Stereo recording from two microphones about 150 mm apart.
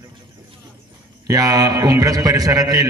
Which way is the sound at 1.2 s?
25° right (ahead or behind).